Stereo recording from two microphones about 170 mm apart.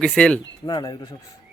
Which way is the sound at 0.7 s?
25° left (ahead or behind).